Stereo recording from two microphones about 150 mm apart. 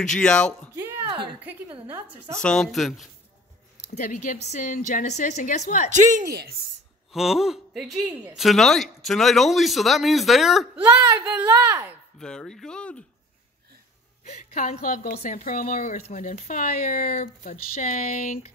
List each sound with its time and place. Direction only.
0.1 s speech: 5° left (ahead or behind)
1.4 s a woman's voice: 10° right (ahead or behind)
2.4 s speech: 5° left (ahead or behind)
3.9 s speech: 55° left (ahead or behind)
5.9 s speech: 55° right (ahead or behind)
7.1 s speech: centre (ahead or behind)
12.2 s speech: 5° left (ahead or behind)
14.2 s a woman's voice: 55° left (ahead or behind)
15.1 s speech: 50° left (ahead or behind)
15.4 s speech: 70° left (ahead or behind)